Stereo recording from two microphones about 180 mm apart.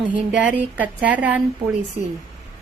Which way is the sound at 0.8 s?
10° right (ahead or behind).